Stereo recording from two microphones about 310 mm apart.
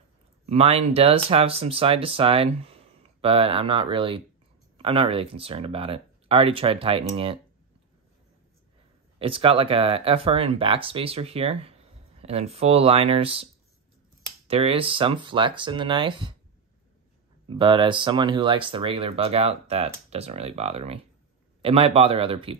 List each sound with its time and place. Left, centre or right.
0.5 s speech: centre
9.2 s speech: centre
14.5 s speech: centre
17.5 s speech: centre